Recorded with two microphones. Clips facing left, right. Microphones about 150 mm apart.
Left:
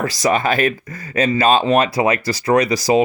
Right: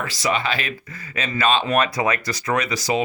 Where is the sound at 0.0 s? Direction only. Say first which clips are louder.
Left 6 dB; 40° left (ahead or behind).